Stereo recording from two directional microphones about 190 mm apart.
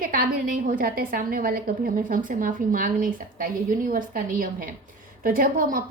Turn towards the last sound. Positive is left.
turn(degrees=-50)  # may be behind; listen again after turning